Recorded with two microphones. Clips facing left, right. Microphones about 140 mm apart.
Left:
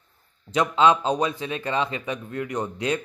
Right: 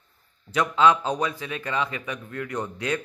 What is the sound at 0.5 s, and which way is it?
Speech, 20° left (ahead or behind).